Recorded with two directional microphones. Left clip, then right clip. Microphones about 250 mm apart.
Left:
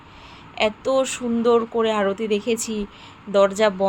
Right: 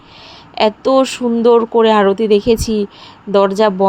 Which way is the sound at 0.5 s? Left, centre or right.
Right.